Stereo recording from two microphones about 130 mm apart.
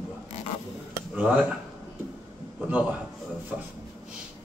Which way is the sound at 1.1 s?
10° right (ahead or behind).